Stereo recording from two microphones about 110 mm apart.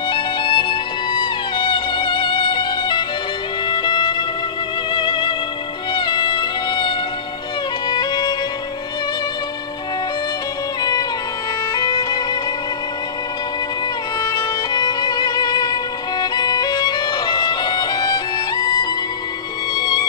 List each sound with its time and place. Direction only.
0.1 s music: 50° left (ahead or behind)
10.8 s music: 35° left (ahead or behind)
14.2 s music: 40° left (ahead or behind)